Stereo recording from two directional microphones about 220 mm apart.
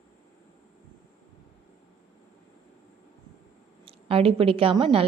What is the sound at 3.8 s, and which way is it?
A woman's voice, 25° right (ahead or behind).